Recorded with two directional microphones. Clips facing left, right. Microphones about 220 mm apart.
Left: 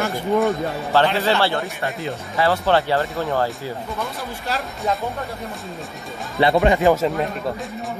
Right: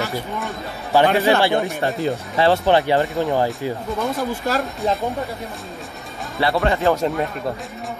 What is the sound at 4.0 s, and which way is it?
Speech, 45° right (ahead or behind).